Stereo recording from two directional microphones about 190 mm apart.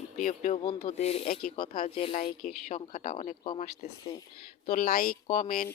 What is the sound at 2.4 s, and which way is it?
Speech, 45° left (ahead or behind).